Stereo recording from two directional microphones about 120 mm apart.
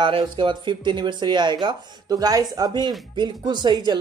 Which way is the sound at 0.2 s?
40° right (ahead or behind).